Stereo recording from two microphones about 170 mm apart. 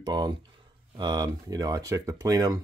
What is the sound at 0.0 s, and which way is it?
Speech, 25° right (ahead or behind).